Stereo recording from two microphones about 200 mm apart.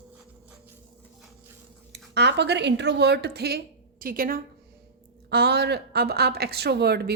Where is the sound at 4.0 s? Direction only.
45° right (ahead or behind).